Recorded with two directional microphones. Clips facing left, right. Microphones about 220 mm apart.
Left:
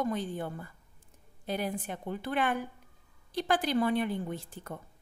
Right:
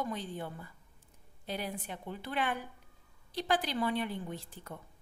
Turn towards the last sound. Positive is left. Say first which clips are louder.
# left 4 dB
turn(degrees=50)  # may be behind; listen again after turning